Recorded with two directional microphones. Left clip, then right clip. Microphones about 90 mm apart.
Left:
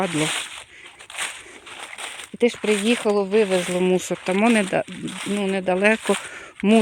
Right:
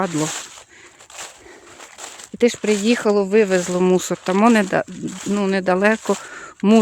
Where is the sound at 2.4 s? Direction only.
90° right.